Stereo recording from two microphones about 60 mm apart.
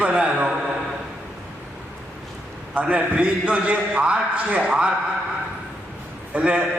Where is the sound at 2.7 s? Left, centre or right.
Centre.